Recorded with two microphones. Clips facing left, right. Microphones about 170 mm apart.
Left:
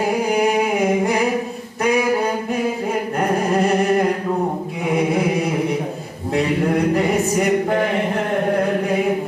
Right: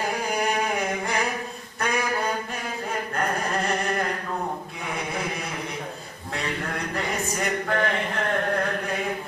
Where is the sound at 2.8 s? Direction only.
15° left (ahead or behind).